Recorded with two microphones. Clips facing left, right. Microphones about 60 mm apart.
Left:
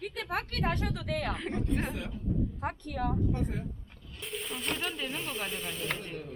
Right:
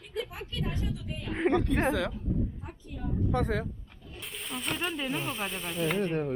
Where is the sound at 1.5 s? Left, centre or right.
Right.